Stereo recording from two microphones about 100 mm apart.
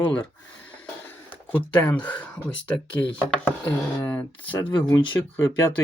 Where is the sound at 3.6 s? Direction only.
20° left (ahead or behind).